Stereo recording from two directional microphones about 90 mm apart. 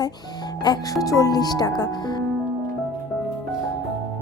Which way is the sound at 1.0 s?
40° left (ahead or behind).